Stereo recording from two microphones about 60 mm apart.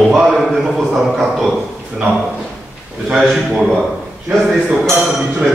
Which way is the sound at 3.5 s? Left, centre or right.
Centre.